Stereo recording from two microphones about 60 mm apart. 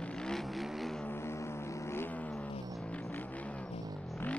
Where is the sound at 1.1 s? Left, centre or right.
Left.